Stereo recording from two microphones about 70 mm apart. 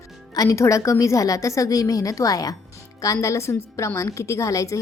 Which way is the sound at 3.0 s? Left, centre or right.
Left.